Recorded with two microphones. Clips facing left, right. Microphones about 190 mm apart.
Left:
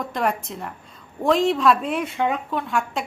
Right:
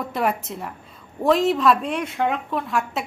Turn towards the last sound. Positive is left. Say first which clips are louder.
# even
turn(degrees=0)  # may be behind; listen again after turning